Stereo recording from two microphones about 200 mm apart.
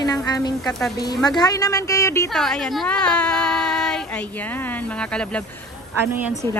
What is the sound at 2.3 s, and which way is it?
Speech, 5° left (ahead or behind).